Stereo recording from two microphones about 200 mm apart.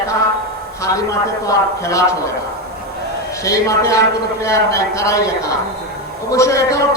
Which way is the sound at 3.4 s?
15° left (ahead or behind).